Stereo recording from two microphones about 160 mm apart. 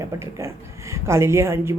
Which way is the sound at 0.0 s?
15° right (ahead or behind).